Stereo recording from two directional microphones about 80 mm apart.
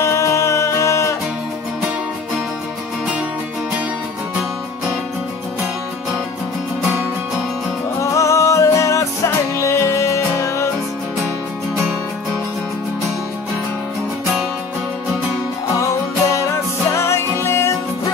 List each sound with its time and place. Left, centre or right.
0.0 s music: left
6.8 s music: right
8.0 s music: left
16.3 s music: left